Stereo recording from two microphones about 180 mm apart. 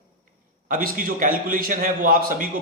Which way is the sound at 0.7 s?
50° right (ahead or behind).